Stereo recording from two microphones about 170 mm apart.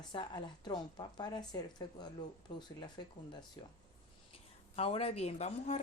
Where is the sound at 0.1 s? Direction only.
25° left (ahead or behind).